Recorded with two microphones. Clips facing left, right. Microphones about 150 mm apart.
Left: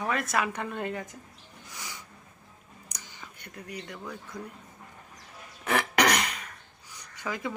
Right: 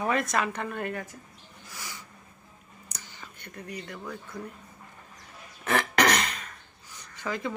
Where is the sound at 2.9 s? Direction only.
15° left (ahead or behind).